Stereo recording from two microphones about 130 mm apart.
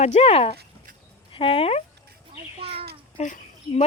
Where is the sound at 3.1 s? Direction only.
60° left (ahead or behind).